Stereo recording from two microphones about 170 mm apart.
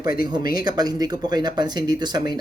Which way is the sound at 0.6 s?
25° right (ahead or behind).